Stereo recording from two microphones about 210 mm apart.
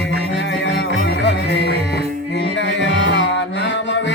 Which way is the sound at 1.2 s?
55° left (ahead or behind).